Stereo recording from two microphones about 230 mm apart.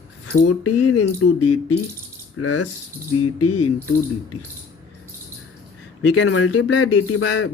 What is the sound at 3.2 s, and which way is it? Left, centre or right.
Mechanisms, left.